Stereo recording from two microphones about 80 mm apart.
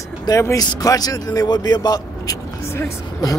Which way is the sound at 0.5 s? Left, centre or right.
Left.